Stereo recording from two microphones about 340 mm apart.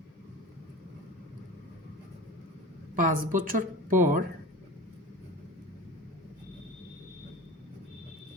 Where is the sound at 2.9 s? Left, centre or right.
Right.